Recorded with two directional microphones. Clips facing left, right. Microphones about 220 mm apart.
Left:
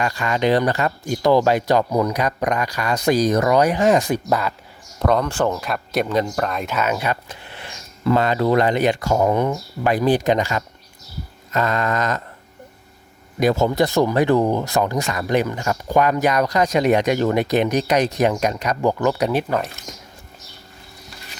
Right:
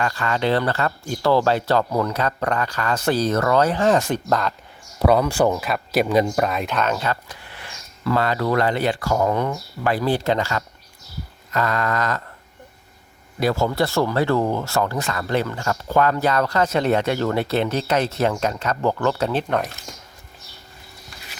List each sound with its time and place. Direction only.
0.0 s speech: 15° left (ahead or behind)
4.9 s speech: 10° right (ahead or behind); by 7.2 s 10° left (ahead or behind)
7.3 s speech: 25° left (ahead or behind)
11.5 s a sound: 20° left (ahead or behind)
13.4 s speech: 20° left (ahead or behind)